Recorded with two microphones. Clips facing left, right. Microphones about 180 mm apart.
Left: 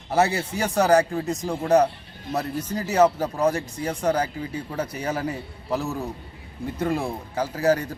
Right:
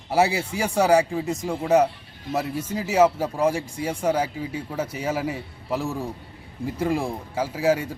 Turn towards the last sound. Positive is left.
turn(degrees=-5)  # may be behind; listen again after turning